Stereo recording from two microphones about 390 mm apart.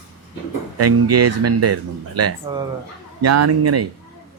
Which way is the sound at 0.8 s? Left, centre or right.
Right.